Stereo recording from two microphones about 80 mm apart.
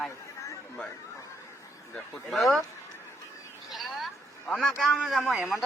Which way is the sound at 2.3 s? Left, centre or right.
Centre.